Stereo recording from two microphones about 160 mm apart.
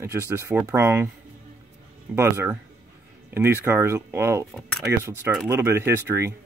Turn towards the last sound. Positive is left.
turn(degrees=-15)  # may be behind; listen again after turning